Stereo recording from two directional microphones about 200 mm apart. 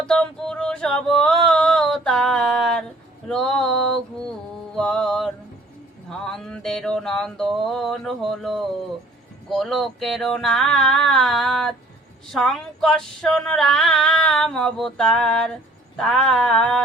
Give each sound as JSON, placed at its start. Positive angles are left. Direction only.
{"t": 0.1, "sound": "male singing", "side_deg": 5}
{"t": 3.2, "sound": "a sound", "side_deg": 0}
{"t": 4.7, "sound": "mantra", "side_deg": 5}
{"t": 6.1, "sound": "music", "side_deg": 5}
{"t": 9.5, "sound": "female singing", "side_deg": 0}